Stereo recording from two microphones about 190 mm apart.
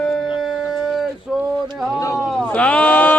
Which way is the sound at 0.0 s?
5° left (ahead or behind).